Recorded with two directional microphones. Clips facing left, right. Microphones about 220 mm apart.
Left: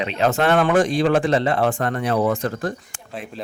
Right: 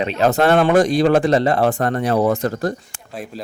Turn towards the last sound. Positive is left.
turn(degrees=-40)  # may be behind; listen again after turning